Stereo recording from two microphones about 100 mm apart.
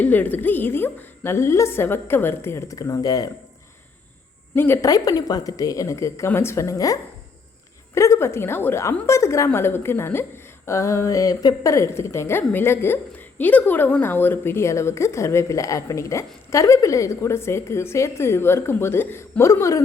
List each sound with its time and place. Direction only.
0.0 s a woman's voice: 15° left (ahead or behind); by 3.2 s 40° left (ahead or behind)
4.5 s a woman's voice: 25° left (ahead or behind)
4.9 s a woman's voice: 40° left (ahead or behind)